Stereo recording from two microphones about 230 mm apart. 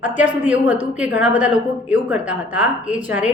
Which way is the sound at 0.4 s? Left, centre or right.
Centre.